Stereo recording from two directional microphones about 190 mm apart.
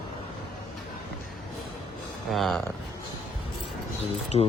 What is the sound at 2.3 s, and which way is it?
Speech, centre (ahead or behind).